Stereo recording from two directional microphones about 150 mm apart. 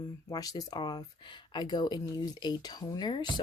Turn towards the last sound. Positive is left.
turn(degrees=30)  # may be behind; listen again after turning